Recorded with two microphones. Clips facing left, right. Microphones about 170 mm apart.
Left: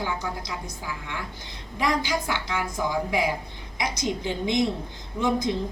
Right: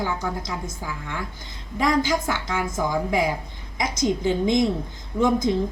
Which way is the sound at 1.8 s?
45° right (ahead or behind).